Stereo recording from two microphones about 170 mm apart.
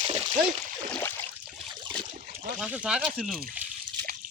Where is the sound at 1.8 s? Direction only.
30° right (ahead or behind).